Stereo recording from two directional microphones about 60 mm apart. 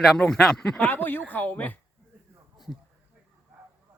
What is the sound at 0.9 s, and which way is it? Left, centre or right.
Speech, left.